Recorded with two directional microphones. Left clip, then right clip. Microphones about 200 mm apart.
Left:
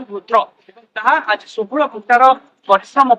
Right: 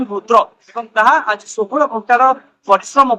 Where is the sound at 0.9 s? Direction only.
30° right (ahead or behind).